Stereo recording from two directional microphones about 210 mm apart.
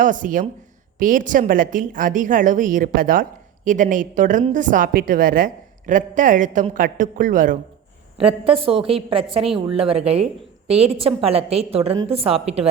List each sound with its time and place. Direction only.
0.0 s a woman's voice: 40° right (ahead or behind)
8.4 s a woman's voice: 25° right (ahead or behind)